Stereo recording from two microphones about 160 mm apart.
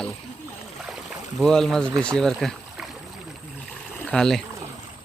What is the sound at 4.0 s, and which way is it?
Speech, 5° left (ahead or behind).